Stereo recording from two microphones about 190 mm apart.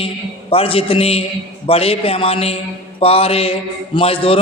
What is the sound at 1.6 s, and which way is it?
A man's voice, 30° left (ahead or behind).